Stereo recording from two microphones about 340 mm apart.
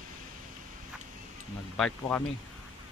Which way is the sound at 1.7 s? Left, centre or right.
Centre.